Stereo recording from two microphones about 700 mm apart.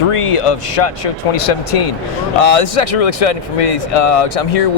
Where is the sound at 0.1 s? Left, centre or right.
Left.